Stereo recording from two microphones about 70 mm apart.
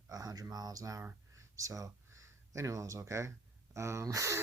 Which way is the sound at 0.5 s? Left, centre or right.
Right.